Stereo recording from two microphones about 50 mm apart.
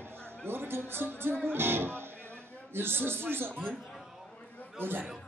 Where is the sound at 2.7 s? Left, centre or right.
Right.